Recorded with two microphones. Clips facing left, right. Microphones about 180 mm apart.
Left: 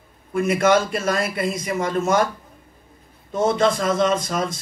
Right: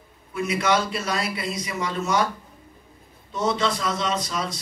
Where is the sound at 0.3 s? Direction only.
50° left (ahead or behind).